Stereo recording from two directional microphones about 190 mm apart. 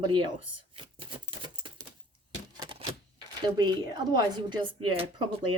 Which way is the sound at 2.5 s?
25° right (ahead or behind).